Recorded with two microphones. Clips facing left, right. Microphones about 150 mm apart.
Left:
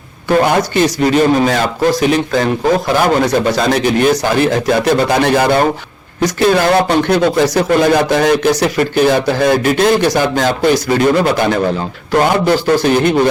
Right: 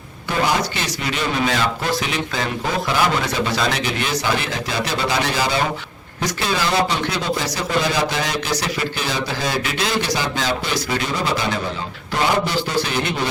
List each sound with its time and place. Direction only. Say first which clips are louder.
0.3 s a man's voice: left 8 dB; 55° left (ahead or behind)